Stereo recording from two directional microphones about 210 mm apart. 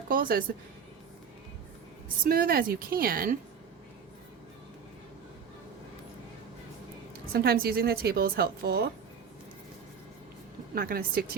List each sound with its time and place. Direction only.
0.1 s a woman's voice: 40° right (ahead or behind)
2.2 s a woman's voice: 45° right (ahead or behind)
7.3 s a woman's voice: 45° right (ahead or behind)
10.8 s a woman's voice: 45° right (ahead or behind)